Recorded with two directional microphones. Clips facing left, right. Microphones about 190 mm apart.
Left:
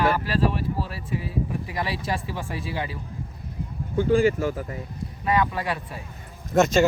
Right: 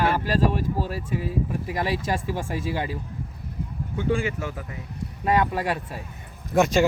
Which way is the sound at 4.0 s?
40° left (ahead or behind).